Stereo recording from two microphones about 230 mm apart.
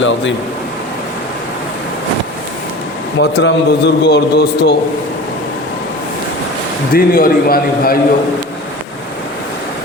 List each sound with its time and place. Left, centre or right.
0.0 s speech: left
3.2 s speech: left
6.9 s a man's voice: left